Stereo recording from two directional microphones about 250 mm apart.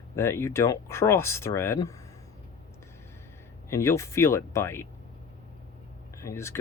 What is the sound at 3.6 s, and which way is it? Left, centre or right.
Speech, centre.